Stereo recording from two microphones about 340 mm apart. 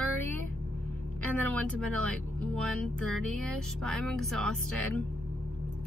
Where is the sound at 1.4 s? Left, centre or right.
Centre.